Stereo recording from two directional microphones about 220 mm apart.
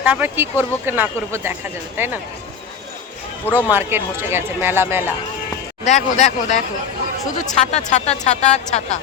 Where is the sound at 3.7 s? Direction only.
10° right (ahead or behind).